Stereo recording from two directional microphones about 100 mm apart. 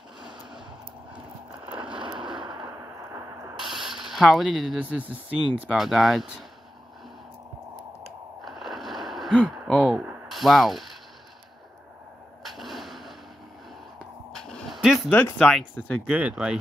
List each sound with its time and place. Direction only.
2.1 s a sound: 5° right (ahead or behind)
2.6 s a sound: 30° right (ahead or behind)
3.5 s mechanisms: 5° right (ahead or behind)
4.7 s speech: 15° right (ahead or behind)
5.8 s speech: centre (ahead or behind)
8.5 s a sound: centre (ahead or behind)
10.2 s mechanisms: centre (ahead or behind)
12.4 s artillery fire: centre (ahead or behind)
14.3 s dog: 5° left (ahead or behind)
14.8 s speech: 5° right (ahead or behind)
15.0 s speech: 20° left (ahead or behind)
15.3 s speech: 10° left (ahead or behind)
16.1 s speech: 10° right (ahead or behind)